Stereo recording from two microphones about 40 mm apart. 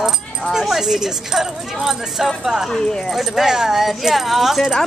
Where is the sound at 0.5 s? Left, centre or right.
Centre.